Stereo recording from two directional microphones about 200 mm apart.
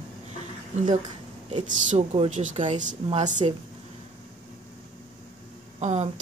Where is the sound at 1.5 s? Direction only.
35° right (ahead or behind).